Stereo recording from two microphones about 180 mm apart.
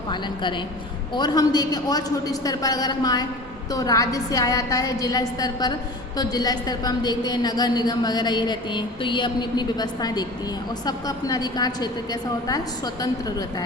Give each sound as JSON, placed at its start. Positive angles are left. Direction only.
{"t": 0.1, "sound": "a woman's voice", "side_deg": 25}